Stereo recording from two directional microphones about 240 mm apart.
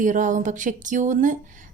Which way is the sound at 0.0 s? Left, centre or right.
Right.